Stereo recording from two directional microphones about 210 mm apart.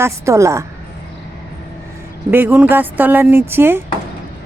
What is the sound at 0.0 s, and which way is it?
Speech, 15° right (ahead or behind).